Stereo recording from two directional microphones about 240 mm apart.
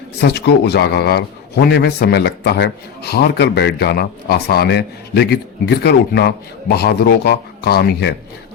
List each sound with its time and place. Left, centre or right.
0.2 s a man's voice: left